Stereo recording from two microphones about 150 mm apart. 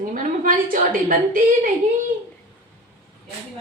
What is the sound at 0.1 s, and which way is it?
A woman's voice, 65° right (ahead or behind).